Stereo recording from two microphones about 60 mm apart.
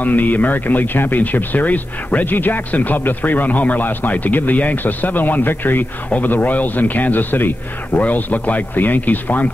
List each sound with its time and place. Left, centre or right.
0.0 s speech: left